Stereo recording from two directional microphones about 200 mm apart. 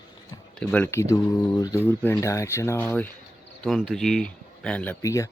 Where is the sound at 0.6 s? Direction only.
5° left (ahead or behind).